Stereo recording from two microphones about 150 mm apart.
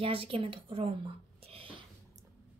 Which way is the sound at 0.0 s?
40° right (ahead or behind).